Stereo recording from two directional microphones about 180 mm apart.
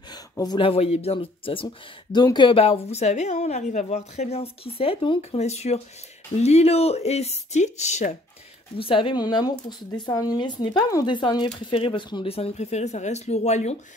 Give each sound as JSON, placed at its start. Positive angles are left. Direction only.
{"t": 0.1, "sound": "a woman's voice", "side_deg": 20}